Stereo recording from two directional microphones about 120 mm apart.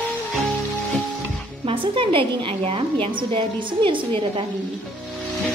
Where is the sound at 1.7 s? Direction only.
45° right (ahead or behind).